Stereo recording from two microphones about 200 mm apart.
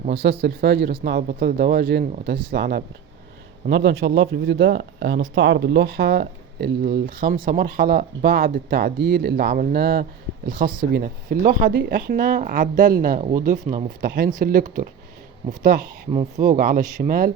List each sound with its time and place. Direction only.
0.2 s speech: 55° right (ahead or behind); by 14.6 s 40° right (ahead or behind)
16.1 s speech: 35° right (ahead or behind)